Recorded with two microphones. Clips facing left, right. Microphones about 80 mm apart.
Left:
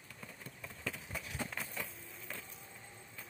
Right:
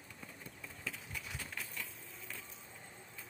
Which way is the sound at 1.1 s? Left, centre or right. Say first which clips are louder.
Left 4 dB; left.